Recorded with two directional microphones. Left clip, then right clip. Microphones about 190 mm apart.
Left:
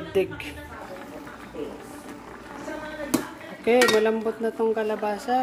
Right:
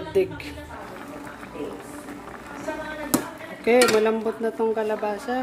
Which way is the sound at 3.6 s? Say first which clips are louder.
Right 1 dB; 5° left (ahead or behind).